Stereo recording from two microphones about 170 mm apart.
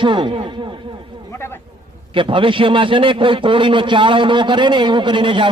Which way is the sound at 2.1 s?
30° right (ahead or behind).